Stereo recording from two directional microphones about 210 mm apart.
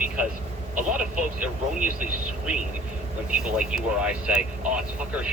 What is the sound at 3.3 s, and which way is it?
Speech, 5° right (ahead or behind).